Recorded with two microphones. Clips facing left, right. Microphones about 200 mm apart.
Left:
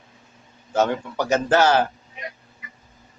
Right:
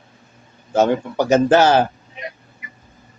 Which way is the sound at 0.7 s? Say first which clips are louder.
Right 5 dB; 25° right (ahead or behind).